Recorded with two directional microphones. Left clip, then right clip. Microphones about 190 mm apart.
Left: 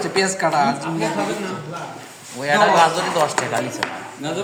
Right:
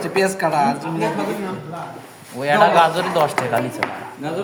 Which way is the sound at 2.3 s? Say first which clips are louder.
Right 1 dB; 35° right (ahead or behind).